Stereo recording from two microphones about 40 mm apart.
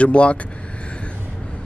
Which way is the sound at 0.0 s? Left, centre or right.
Left.